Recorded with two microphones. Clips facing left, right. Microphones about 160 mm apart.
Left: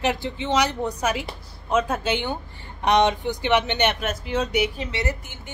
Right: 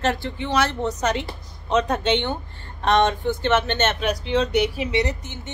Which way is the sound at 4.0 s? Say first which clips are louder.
Right 4 dB; 5° left (ahead or behind).